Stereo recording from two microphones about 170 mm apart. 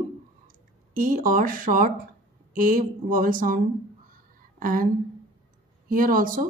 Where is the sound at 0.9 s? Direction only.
55° right (ahead or behind).